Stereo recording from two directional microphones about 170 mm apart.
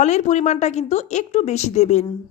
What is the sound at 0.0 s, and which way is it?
A woman's voice, 45° left (ahead or behind).